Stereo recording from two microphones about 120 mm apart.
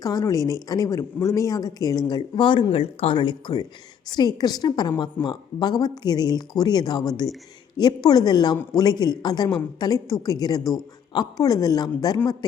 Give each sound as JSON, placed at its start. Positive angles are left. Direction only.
{"t": 0.0, "sound": "speech", "side_deg": 30}
{"t": 2.7, "sound": "speech", "side_deg": 55}